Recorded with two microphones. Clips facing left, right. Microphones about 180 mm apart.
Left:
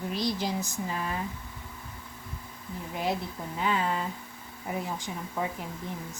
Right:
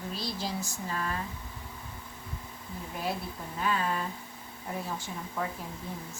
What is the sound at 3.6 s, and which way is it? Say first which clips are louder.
Speech: left 2 dB; 20° left (ahead or behind).